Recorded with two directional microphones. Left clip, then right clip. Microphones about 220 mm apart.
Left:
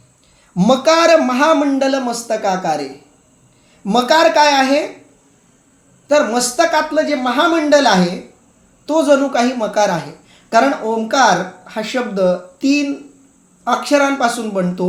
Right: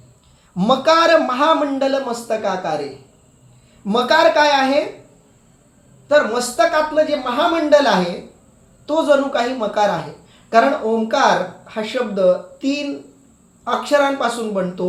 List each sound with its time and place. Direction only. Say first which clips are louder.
0.5 s speech: left 2 dB; 25° left (ahead or behind)
3.8 s speech: left 2 dB; 25° left (ahead or behind)
6.1 s speech: left 1 dB; 25° left (ahead or behind)